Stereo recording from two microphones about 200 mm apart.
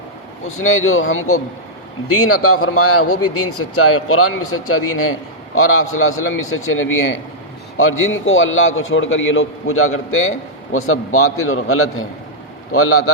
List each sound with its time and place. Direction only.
0.5 s a man's voice: 90° left